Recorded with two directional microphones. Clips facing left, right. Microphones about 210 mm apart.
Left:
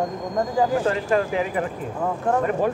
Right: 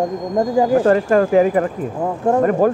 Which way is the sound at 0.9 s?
50° right (ahead or behind).